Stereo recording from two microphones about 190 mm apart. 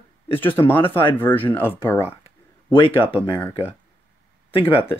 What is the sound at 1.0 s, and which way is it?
Speech, 10° left (ahead or behind).